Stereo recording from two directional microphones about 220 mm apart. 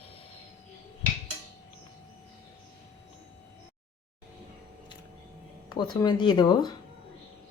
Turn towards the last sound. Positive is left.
turn(degrees=20)  # may be behind; listen again after turning